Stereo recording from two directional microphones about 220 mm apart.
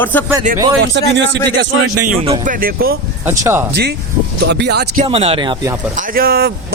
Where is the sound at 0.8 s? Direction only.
55° right (ahead or behind).